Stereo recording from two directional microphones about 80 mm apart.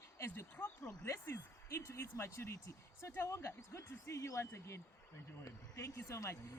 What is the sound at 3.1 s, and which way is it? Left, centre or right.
Speech, left.